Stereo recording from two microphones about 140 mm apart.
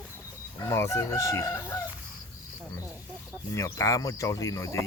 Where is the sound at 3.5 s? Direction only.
25° left (ahead or behind).